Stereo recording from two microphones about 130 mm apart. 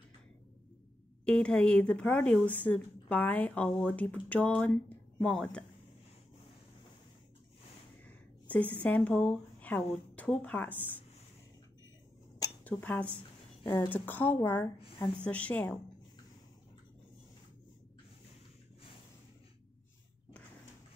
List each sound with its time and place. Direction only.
1.2 s speech: 5° left (ahead or behind)
8.0 s a sound: 10° left (ahead or behind)
10.1 s speech: 10° left (ahead or behind)
12.6 s speech: 10° left (ahead or behind)